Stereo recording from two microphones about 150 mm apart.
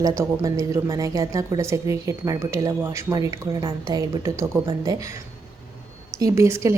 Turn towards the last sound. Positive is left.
turn(degrees=-20)  # may be behind; listen again after turning